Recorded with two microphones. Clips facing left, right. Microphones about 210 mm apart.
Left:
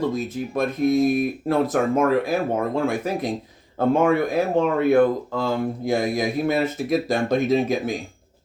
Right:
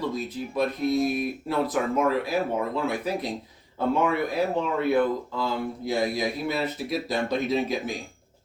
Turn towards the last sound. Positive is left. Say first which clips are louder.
# left 6 dB
turn(degrees=45)  # may be behind; listen again after turning